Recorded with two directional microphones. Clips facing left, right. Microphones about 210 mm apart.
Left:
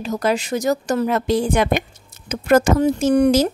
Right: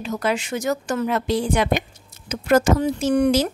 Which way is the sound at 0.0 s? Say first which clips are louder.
Left 3 dB; 40° left (ahead or behind).